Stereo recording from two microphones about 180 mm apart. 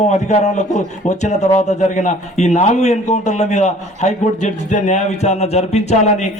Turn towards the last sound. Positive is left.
turn(degrees=40)  # may be behind; listen again after turning